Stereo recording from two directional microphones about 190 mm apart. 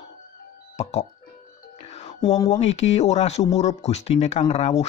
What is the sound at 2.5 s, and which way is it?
Speech, 35° left (ahead or behind).